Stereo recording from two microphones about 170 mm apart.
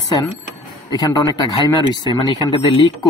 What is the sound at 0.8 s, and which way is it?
Speech, 25° left (ahead or behind).